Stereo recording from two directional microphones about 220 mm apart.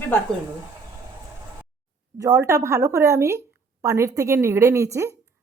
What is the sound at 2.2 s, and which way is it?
A woman's voice, 15° right (ahead or behind).